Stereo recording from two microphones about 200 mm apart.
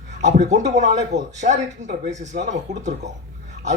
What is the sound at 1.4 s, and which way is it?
Speech, 50° right (ahead or behind).